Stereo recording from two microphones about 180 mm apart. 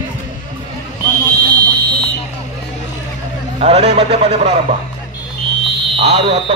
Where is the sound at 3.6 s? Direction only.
35° right (ahead or behind).